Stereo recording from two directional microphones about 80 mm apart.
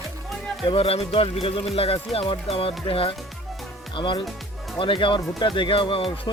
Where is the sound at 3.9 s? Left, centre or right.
Left.